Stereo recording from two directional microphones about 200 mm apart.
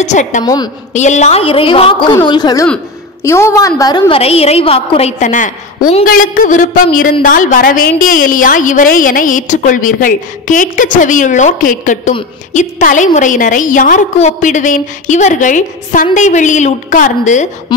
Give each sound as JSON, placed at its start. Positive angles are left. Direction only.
{"t": 0.0, "sound": "a woman's voice", "side_deg": 35}